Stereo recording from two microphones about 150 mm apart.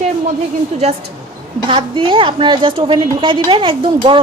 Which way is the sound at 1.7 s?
35° right (ahead or behind).